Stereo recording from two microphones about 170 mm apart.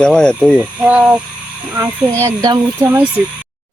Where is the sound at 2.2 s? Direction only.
20° right (ahead or behind).